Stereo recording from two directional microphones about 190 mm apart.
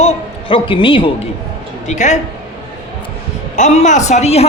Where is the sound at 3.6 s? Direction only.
40° left (ahead or behind).